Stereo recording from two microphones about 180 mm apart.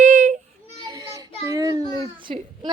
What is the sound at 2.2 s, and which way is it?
Speech, 25° right (ahead or behind).